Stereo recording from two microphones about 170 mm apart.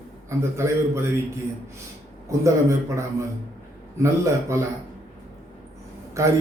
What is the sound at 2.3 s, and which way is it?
Speech, 20° right (ahead or behind).